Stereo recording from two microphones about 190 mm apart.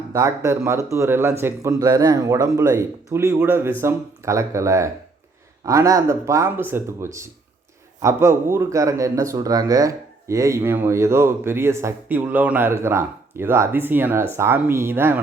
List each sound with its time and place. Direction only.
0.1 s speech: 15° right (ahead or behind)